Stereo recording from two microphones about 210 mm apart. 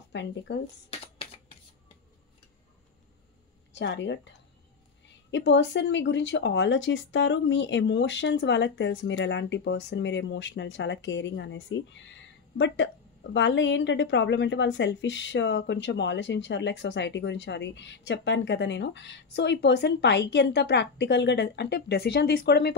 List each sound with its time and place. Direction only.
0.1 s speech: 55° left (ahead or behind)
0.8 s a sound: 30° left (ahead or behind)
3.7 s speech: 55° left (ahead or behind)
5.3 s speech: 60° left (ahead or behind)